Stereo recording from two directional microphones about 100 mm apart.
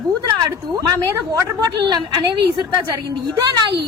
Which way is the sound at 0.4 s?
40° right (ahead or behind).